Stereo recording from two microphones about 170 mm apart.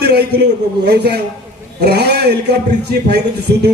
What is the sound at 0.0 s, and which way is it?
A man's voice, 75° right (ahead or behind).